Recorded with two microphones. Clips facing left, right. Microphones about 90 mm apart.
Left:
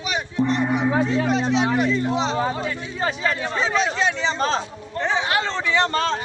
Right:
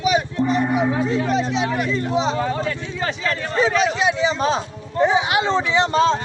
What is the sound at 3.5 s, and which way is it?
Speech, 5° right (ahead or behind).